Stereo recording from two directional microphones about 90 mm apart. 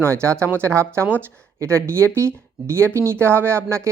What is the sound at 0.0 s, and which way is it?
A woman's voice, 30° right (ahead or behind).